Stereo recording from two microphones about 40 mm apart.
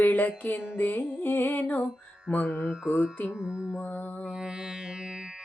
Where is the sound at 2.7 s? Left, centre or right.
Right.